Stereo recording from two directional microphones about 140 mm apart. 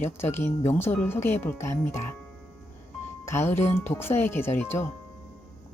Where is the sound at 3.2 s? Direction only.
15° left (ahead or behind).